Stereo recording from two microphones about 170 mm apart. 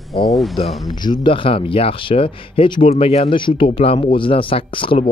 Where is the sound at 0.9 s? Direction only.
25° left (ahead or behind).